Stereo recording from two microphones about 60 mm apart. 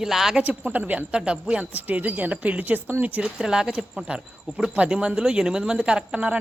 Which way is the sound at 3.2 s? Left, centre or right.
Centre.